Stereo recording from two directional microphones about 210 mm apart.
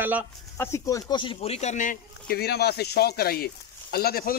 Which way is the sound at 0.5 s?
15° left (ahead or behind).